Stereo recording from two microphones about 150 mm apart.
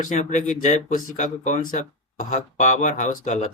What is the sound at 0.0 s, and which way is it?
Speech, 60° left (ahead or behind).